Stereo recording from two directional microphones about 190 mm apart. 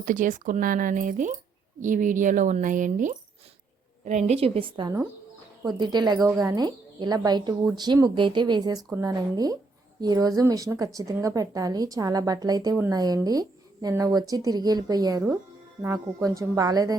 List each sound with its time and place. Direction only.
0.0 s a woman's voice: 45° right (ahead or behind); by 17.0 s 20° right (ahead or behind)